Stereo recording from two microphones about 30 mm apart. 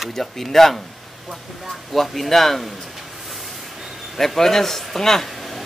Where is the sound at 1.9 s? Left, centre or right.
Centre.